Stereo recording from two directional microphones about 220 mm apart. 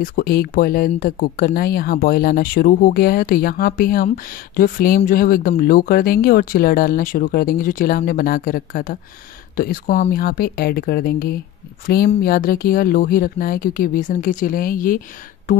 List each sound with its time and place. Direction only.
0.0 s speech: 40° left (ahead or behind)